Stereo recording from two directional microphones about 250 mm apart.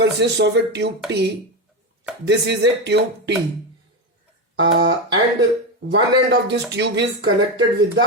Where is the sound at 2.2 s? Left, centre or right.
Right.